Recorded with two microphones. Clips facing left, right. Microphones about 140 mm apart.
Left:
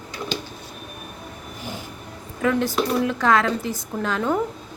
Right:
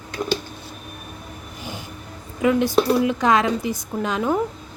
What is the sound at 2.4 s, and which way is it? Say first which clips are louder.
A woman's voice: right 3 dB; 15° right (ahead or behind).